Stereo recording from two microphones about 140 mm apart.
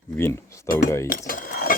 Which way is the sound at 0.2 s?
20° left (ahead or behind).